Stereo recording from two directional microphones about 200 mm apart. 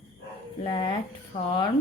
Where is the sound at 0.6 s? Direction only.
25° left (ahead or behind).